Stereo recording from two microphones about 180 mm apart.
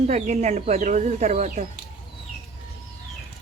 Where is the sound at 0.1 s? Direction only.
40° right (ahead or behind).